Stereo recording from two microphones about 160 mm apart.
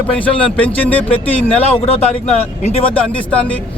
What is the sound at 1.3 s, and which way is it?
Speech, 35° left (ahead or behind).